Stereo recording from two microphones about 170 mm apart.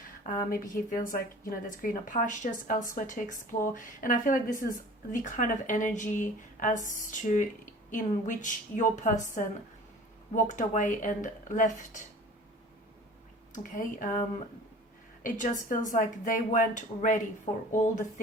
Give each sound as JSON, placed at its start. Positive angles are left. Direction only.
{"t": 0.5, "sound": "a woman's voice", "side_deg": 55}
{"t": 13.5, "sound": "a woman's voice", "side_deg": 50}
{"t": 17.5, "sound": "speech", "side_deg": 30}